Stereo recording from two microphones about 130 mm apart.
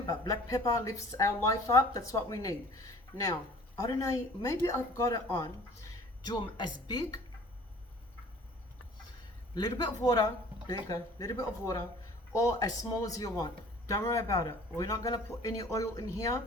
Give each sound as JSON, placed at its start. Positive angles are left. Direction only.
{"t": 0.0, "sound": "a woman's voice", "side_deg": 30}
{"t": 9.6, "sound": "speech", "side_deg": 30}